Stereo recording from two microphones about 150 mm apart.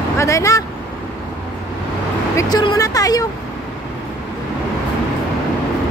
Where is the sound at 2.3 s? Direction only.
25° left (ahead or behind).